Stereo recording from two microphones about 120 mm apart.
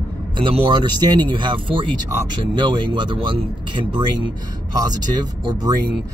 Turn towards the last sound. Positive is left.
turn(degrees=-35)  # may be behind; listen again after turning